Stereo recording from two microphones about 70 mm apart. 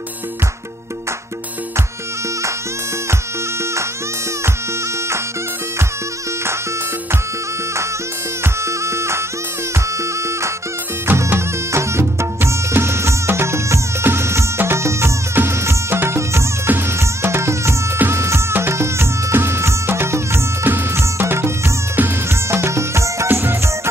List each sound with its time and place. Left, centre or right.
8.6 s music: right
11.1 s music: right
23.2 s music: right